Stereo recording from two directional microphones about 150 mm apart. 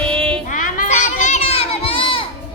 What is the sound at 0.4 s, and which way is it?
Children playing, 60° left (ahead or behind).